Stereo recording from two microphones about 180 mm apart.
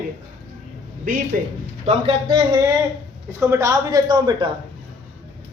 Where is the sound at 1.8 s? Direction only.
30° right (ahead or behind).